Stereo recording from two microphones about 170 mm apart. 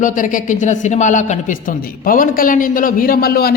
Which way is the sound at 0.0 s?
50° left (ahead or behind).